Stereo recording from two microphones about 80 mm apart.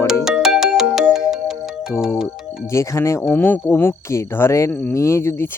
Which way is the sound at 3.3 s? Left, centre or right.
Left.